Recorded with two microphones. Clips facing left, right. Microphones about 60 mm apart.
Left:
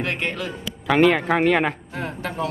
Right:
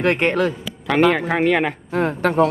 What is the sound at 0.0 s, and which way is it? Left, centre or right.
Speech, right.